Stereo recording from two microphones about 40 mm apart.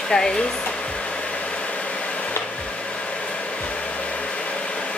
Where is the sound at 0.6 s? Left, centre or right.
Left.